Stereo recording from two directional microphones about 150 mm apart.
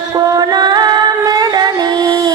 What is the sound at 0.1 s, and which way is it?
Music, 25° right (ahead or behind).